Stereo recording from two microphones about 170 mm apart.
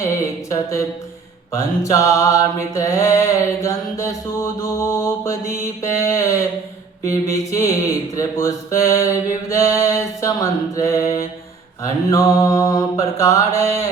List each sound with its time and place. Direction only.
0.5 s mantra: 20° left (ahead or behind)